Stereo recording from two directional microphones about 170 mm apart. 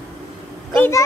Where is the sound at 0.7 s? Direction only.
10° left (ahead or behind).